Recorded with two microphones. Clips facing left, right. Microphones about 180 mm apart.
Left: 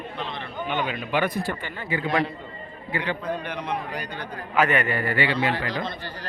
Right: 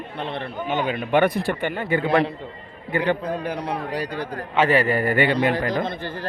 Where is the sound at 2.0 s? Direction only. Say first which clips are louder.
Right 2 dB; 30° right (ahead or behind).